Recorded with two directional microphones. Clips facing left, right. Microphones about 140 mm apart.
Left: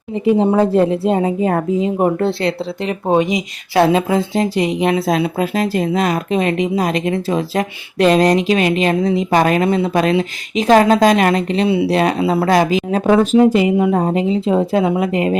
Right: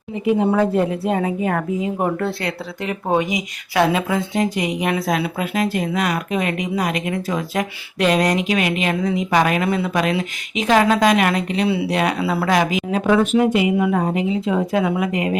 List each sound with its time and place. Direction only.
0.3 s a woman's voice: 30° left (ahead or behind)